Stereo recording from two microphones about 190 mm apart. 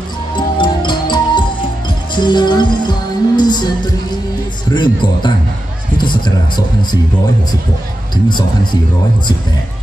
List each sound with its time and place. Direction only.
0.4 s music: 25° left (ahead or behind)